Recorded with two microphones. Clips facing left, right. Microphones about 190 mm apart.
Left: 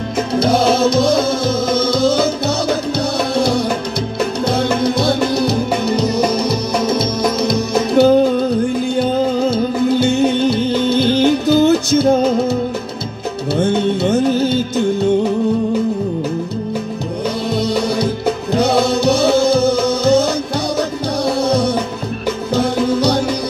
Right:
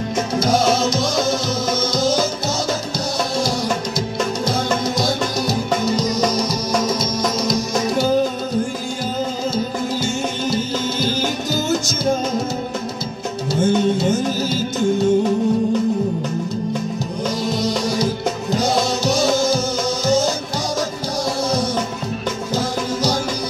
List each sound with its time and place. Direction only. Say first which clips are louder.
0.4 s music: left 4 dB; 60° left (ahead or behind)
3.3 s music: left 6 dB; 60° left (ahead or behind)
9.4 s music: left 7 dB; 60° left (ahead or behind)
13.5 s music: left 1 dB; 60° left (ahead or behind)
17.6 s music: left 5 dB; 60° left (ahead or behind)
22.6 s music: left 8 dB; 60° left (ahead or behind)